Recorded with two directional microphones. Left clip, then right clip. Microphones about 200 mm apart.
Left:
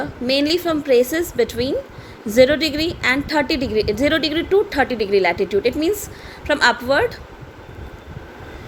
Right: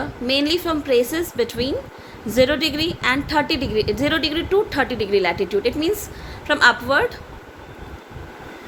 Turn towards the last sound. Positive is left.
turn(degrees=15)  # may be behind; listen again after turning